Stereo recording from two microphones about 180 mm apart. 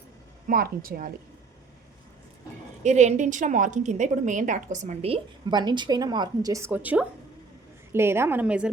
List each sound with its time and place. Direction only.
0.4 s a woman's voice: 55° right (ahead or behind)
2.8 s a woman's voice: 40° right (ahead or behind); by 8.7 s 5° right (ahead or behind)